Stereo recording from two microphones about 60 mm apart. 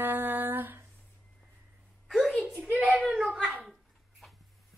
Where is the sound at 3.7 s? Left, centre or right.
Centre.